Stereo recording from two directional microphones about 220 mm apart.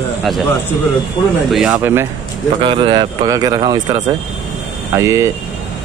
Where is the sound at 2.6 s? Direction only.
20° right (ahead or behind).